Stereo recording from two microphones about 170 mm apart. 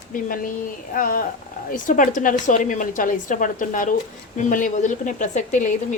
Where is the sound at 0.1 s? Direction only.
50° left (ahead or behind).